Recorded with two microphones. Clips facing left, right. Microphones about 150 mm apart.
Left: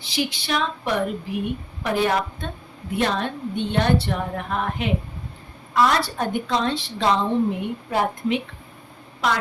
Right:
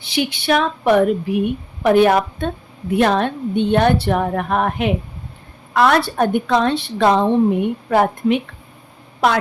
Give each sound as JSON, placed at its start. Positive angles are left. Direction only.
{"t": 0.0, "sound": "a woman's voice", "side_deg": -60}